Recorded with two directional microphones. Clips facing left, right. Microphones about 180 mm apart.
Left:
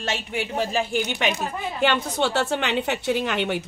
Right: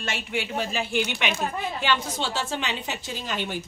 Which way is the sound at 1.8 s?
60° left (ahead or behind).